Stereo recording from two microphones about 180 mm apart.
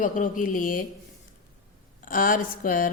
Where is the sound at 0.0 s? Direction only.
50° left (ahead or behind).